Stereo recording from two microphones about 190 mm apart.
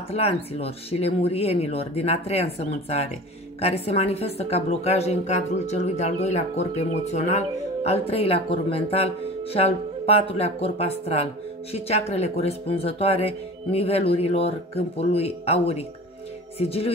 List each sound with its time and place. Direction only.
0.1 s speech: 35° left (ahead or behind)